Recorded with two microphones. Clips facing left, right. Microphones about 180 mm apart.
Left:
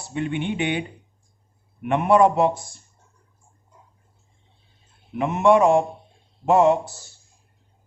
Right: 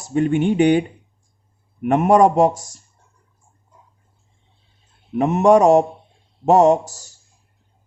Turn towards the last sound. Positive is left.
turn(degrees=-40)  # may be behind; listen again after turning